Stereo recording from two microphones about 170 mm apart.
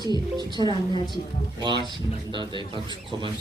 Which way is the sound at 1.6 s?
25° right (ahead or behind).